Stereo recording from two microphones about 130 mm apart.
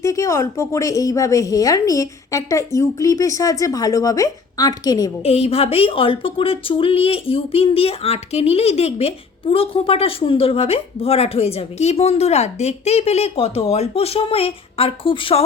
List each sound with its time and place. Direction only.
0.0 s speech: 25° left (ahead or behind)
5.2 s speech: 50° left (ahead or behind)